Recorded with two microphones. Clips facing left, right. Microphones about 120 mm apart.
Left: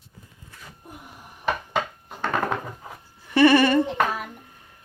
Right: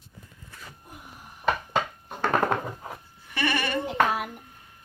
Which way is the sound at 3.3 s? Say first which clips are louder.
Left 12 dB; 35° left (ahead or behind).